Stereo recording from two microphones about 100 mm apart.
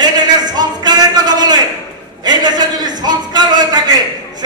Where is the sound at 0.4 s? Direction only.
45° right (ahead or behind).